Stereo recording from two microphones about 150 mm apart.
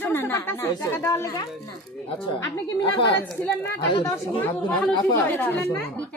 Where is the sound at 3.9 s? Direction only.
35° left (ahead or behind).